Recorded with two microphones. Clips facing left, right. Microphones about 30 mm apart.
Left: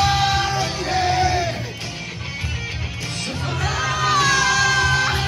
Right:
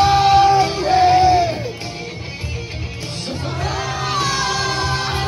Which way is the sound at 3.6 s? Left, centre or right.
Centre.